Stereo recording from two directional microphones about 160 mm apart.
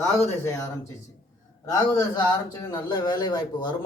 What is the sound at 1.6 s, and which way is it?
A man's voice, 20° left (ahead or behind).